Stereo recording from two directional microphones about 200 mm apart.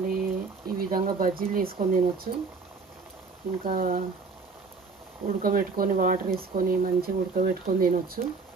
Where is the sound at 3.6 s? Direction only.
45° right (ahead or behind).